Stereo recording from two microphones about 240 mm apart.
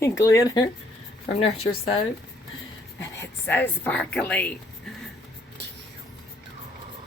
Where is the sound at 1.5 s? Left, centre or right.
Left.